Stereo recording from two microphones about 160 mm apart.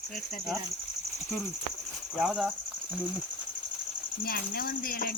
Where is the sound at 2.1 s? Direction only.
Centre (ahead or behind).